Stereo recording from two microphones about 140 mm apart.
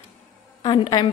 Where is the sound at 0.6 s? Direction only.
35° left (ahead or behind).